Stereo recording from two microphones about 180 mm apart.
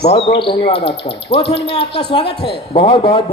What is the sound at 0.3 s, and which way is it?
Speech, 30° left (ahead or behind).